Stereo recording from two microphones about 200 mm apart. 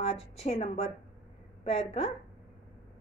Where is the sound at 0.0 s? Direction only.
30° left (ahead or behind).